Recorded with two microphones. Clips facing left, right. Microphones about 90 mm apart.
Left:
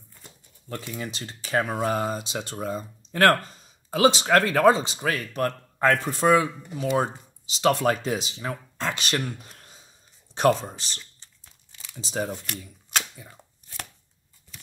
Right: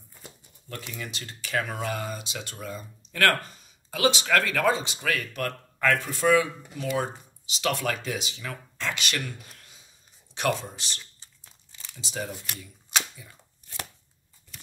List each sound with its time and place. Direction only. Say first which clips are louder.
0.9 s speech: left 4 dB; 30° left (ahead or behind)
11.2 s crumpling: even; 10° right (ahead or behind)
11.9 s speech: left 5 dB; 35° left (ahead or behind)